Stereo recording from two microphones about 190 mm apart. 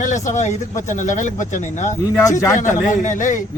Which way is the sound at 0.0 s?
40° left (ahead or behind).